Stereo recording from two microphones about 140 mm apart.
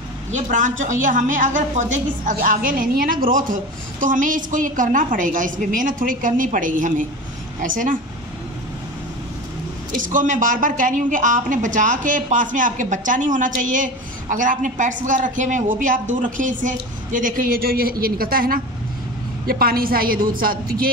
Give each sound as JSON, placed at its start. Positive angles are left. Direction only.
{"t": 0.3, "sound": "a woman's voice", "side_deg": -65}
{"t": 10.1, "sound": "a woman's voice", "side_deg": -70}